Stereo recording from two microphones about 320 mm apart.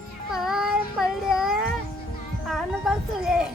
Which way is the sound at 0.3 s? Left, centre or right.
Centre.